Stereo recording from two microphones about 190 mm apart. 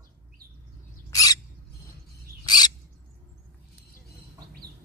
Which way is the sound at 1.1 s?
20° left (ahead or behind).